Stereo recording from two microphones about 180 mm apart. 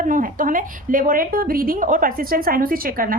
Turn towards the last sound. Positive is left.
turn(degrees=-55)  # may be behind; listen again after turning